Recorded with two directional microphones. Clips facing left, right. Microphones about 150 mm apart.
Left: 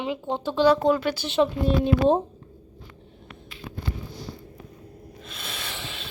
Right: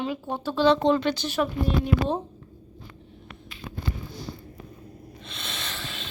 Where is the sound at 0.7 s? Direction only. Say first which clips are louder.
Right 1 dB; 5° left (ahead or behind).